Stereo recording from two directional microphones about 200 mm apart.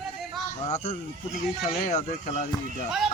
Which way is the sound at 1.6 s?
40° left (ahead or behind).